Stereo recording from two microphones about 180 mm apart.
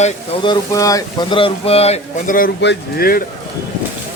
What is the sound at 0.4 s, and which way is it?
Speech, 20° left (ahead or behind).